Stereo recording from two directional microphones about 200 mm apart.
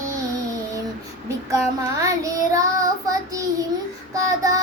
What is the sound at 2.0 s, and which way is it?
Child singing, 15° right (ahead or behind).